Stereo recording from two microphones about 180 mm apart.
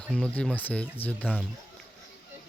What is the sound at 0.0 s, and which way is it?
Speech, 5° left (ahead or behind).